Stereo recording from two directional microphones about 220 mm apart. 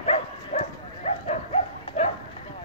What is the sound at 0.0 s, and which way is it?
Dog, 30° left (ahead or behind).